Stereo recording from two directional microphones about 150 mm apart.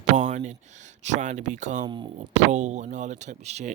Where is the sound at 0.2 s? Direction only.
55° right (ahead or behind).